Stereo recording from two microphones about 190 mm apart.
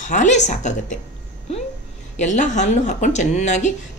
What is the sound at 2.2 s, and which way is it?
Speech, 40° left (ahead or behind).